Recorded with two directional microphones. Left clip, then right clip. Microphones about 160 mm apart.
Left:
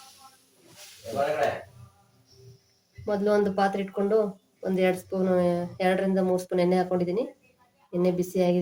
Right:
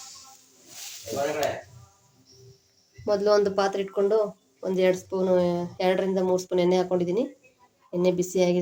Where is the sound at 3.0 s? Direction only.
40° right (ahead or behind).